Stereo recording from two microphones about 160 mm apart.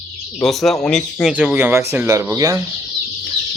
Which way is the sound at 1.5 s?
15° right (ahead or behind).